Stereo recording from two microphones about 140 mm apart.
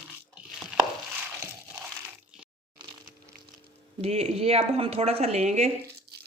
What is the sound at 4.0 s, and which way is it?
A woman's voice, 45° right (ahead or behind).